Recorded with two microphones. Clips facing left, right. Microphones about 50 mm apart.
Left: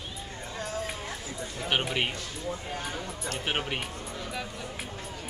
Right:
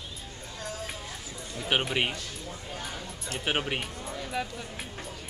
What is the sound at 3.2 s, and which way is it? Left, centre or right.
Speech, centre.